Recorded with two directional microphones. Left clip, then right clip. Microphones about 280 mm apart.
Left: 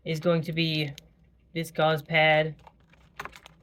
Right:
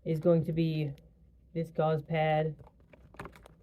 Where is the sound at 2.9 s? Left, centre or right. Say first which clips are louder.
Left 7 dB; right.